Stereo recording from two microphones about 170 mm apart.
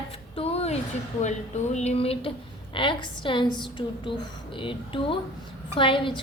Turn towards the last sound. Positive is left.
turn(degrees=30)  # may be behind; listen again after turning